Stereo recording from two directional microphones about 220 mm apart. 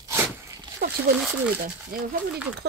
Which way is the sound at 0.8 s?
40° right (ahead or behind).